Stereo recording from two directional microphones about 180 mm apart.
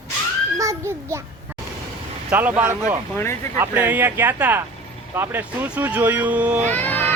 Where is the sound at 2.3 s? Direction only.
10° right (ahead or behind).